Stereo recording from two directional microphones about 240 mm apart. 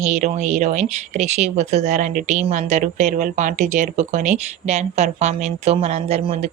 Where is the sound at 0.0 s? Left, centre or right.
Right.